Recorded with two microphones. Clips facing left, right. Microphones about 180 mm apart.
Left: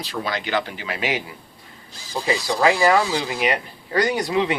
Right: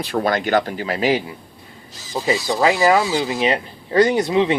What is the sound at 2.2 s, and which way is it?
Speech, 20° right (ahead or behind).